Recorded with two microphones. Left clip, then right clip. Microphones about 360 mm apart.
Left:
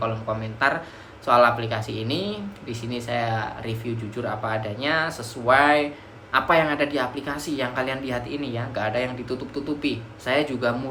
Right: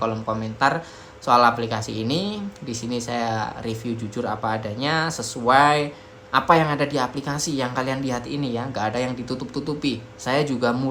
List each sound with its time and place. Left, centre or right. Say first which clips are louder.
0.0 s a woman's voice: right 2 dB; centre